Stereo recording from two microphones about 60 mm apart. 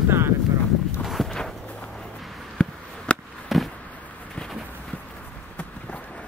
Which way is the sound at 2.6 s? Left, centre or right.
Centre.